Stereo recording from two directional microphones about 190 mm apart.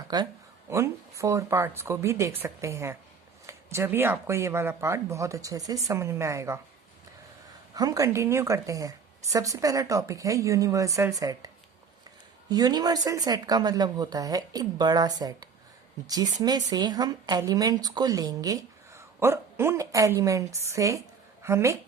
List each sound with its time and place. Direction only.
0.1 s speech: 20° right (ahead or behind)
7.8 s speech: 20° right (ahead or behind)